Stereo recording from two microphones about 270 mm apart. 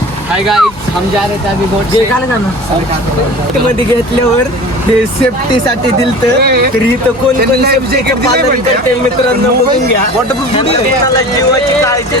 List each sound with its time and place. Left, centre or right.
0.4 s speech: centre
6.4 s a man's voice: right